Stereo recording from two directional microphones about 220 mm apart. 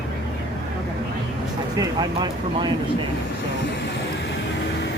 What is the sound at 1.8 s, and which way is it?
Speech, 20° right (ahead or behind).